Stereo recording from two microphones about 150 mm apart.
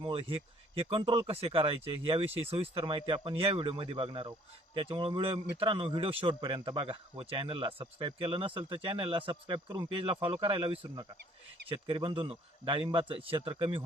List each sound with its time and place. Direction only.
0.0 s speech: 35° right (ahead or behind)